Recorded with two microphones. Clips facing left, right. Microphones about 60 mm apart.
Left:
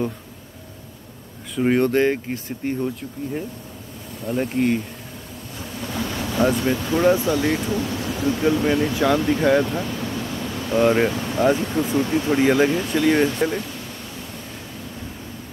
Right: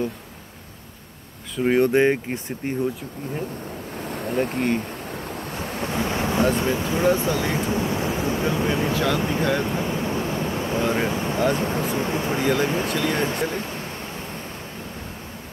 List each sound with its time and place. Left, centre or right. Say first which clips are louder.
1.6 s speech: even; centre
1.9 s speech: right 1 dB; centre
4.1 s speech: even; right
5.3 s ocean: right 3 dB; right
5.9 s thunder: right 2 dB; right
6.5 s speech: left 2 dB; right
8.9 s speech: left 3 dB; left
9.6 s a sound: left 2 dB; right
11.1 s speech: left 2 dB; right
12.4 s speech: left 5 dB; left
12.6 s speech: left 3 dB; right
12.9 s speech: left 5 dB; centre
13.2 s speech: left 4 dB; right